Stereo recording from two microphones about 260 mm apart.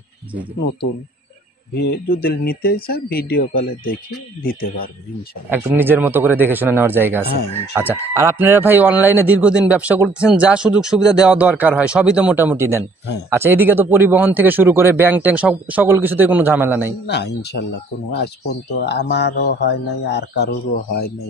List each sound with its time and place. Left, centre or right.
1.8 s speech: left
5.5 s speech: centre
7.2 s speech: left
7.7 s speech: centre
17.0 s speech: left